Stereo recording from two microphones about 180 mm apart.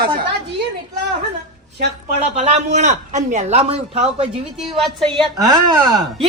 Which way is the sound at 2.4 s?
40° right (ahead or behind).